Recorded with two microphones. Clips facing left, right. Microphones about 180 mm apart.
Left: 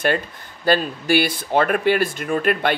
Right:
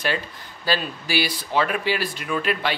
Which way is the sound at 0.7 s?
55° left (ahead or behind).